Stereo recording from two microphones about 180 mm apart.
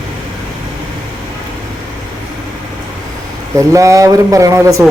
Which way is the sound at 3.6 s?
15° right (ahead or behind).